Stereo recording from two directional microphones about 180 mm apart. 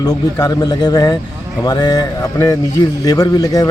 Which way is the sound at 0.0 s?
20° left (ahead or behind).